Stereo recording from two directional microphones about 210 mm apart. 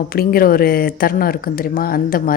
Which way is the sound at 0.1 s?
45° left (ahead or behind).